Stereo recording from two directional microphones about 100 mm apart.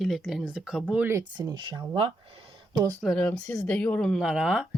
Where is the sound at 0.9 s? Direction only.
20° right (ahead or behind).